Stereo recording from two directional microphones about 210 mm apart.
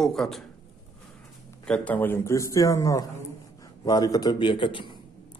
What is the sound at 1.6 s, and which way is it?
A man's voice, 5° left (ahead or behind).